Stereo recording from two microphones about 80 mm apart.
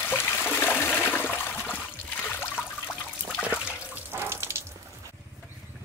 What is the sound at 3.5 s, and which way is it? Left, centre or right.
Toilet flush, centre.